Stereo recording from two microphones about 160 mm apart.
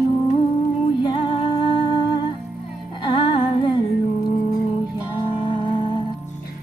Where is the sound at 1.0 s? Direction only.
30° left (ahead or behind).